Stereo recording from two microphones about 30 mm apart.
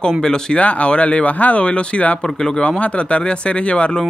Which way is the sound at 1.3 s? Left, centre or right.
Left.